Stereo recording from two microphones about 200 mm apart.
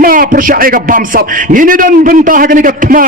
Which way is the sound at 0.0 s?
45° right (ahead or behind).